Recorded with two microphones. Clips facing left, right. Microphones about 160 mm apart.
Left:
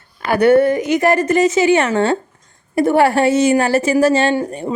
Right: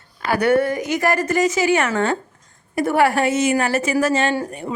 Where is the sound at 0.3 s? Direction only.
25° left (ahead or behind).